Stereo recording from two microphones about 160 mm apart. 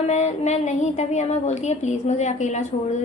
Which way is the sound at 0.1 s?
45° left (ahead or behind).